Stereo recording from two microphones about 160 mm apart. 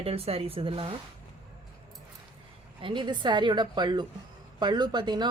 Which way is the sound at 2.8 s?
30° right (ahead or behind).